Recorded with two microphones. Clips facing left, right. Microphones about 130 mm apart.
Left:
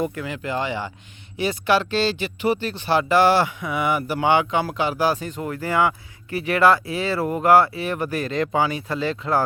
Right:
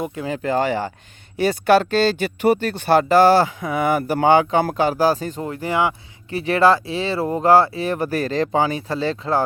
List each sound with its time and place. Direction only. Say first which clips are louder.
0.0 s speech: left 1 dB; 20° right (ahead or behind)
0.3 s speech: right 6 dB; 40° right (ahead or behind)
5.5 s speech: even; 20° right (ahead or behind)